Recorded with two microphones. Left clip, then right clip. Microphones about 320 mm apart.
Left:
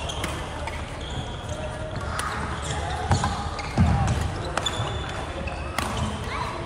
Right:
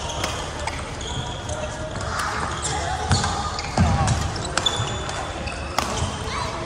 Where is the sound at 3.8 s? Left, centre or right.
Right.